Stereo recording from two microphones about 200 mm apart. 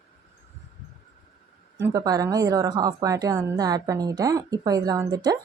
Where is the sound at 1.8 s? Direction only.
20° right (ahead or behind).